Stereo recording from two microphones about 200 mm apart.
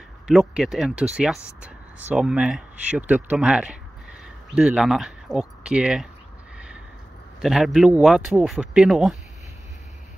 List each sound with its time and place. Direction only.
0.3 s speech: 5° right (ahead or behind)
7.4 s speech: centre (ahead or behind)